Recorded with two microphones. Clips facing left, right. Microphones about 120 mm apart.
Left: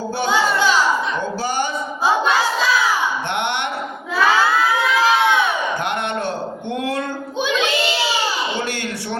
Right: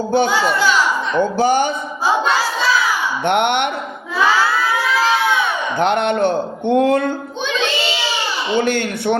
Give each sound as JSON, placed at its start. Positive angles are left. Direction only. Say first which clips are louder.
{"t": 1.4, "sound": "a man's voice", "louder": "right 9 dB", "side_deg": -55}
{"t": 3.2, "sound": "a man's voice", "louder": "right 7 dB", "side_deg": -55}
{"t": 5.8, "sound": "a man's voice", "louder": "right 7 dB", "side_deg": -60}
{"t": 8.5, "sound": "a man's voice", "louder": "right 7 dB", "side_deg": -55}